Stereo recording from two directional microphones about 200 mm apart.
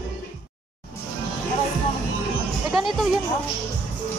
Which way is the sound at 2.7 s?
Centre (ahead or behind).